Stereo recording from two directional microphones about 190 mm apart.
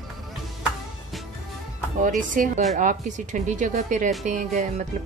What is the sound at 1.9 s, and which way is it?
A woman's voice, 45° right (ahead or behind).